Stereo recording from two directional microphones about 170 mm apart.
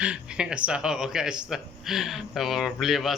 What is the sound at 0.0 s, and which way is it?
Speech, 5° right (ahead or behind).